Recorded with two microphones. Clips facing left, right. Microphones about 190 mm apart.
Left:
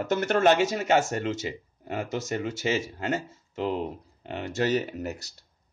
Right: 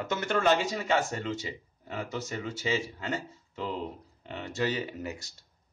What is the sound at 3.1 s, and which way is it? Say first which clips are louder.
Speech: left 5 dB; 45° left (ahead or behind).